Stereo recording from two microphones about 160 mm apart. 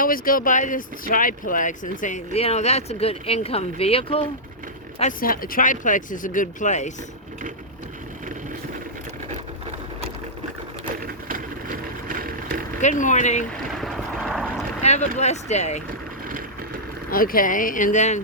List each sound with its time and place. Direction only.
0.0 s speech: 60° left (ahead or behind); by 4.3 s 35° left (ahead or behind)
4.9 s speech: 55° left (ahead or behind)
11.0 s vehicle: 60° right (ahead or behind)
12.8 s speech: 50° left (ahead or behind)
13.8 s vehicle: centre (ahead or behind)
14.8 s speech: 45° left (ahead or behind)
17.1 s speech: 60° left (ahead or behind)